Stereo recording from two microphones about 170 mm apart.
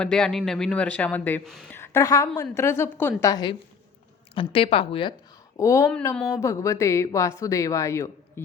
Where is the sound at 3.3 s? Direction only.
25° left (ahead or behind).